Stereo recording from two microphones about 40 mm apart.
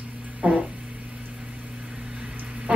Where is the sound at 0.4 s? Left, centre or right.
Right.